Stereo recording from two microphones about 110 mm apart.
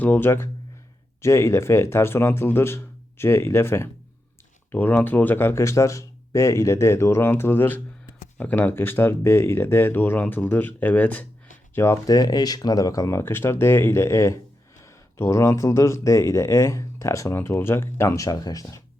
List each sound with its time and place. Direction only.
0.0 s speech: 15° left (ahead or behind)
12.0 s speech: 35° left (ahead or behind)
18.3 s speech: 35° left (ahead or behind)